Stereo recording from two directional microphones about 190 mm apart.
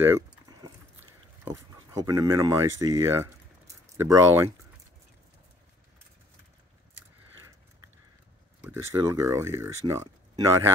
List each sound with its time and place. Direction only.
0.0 s keys jangling: 15° right (ahead or behind)
1.4 s speech: 15° right (ahead or behind)
8.6 s speech: 15° right (ahead or behind)